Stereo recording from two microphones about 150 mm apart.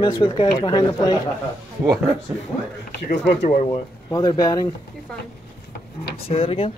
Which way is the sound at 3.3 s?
50° left (ahead or behind).